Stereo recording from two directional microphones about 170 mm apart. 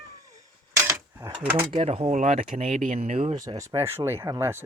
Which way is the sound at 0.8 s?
15° right (ahead or behind).